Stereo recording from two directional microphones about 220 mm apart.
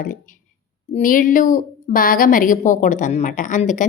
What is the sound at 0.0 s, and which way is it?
A woman's voice, 35° left (ahead or behind).